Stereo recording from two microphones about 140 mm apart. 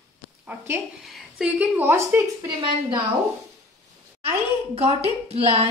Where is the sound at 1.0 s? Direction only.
5° right (ahead or behind).